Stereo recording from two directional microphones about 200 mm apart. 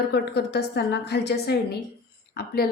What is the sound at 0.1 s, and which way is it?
A woman's voice, 55° left (ahead or behind).